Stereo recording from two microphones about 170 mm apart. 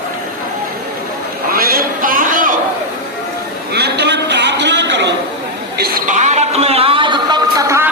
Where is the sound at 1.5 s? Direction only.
60° right (ahead or behind).